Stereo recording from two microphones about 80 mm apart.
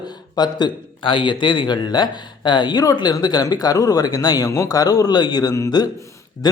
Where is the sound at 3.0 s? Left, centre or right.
Left.